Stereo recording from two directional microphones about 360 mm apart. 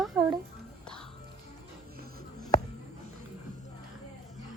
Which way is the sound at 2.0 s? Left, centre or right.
Right.